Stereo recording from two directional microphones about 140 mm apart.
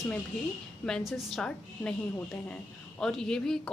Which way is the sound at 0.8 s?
Centre (ahead or behind).